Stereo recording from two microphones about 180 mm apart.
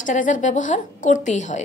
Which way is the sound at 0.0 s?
45° left (ahead or behind).